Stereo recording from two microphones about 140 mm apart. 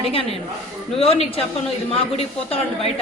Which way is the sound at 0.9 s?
45° left (ahead or behind).